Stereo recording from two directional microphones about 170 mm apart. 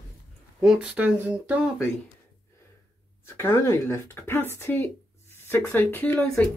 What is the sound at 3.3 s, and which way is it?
Speech, 15° left (ahead or behind).